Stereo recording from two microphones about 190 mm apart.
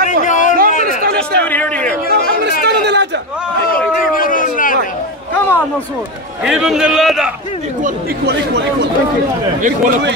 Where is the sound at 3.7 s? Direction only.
45° left (ahead or behind).